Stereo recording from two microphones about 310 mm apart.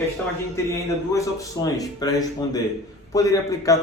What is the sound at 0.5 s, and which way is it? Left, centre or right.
A man's voice, centre.